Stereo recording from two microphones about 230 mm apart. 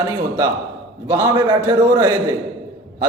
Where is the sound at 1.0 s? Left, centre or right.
Centre.